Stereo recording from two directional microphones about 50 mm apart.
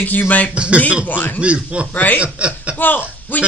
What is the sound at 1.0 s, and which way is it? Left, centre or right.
Speech, left.